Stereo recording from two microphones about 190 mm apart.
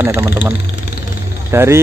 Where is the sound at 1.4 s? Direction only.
15° right (ahead or behind).